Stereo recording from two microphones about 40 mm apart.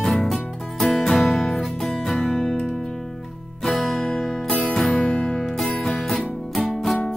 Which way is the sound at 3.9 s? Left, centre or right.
Centre.